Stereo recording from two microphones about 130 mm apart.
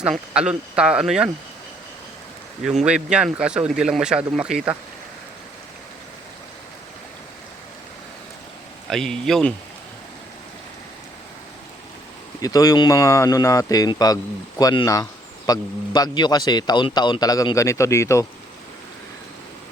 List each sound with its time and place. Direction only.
0.0 s speech: 5° right (ahead or behind)
2.6 s speech: 5° right (ahead or behind)
8.9 s speech: 5° left (ahead or behind)
12.4 s a man's voice: 30° left (ahead or behind)